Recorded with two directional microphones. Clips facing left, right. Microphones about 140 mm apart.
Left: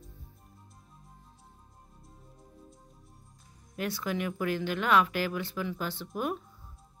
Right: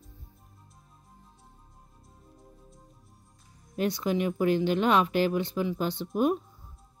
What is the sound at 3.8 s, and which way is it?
Speech, 20° right (ahead or behind).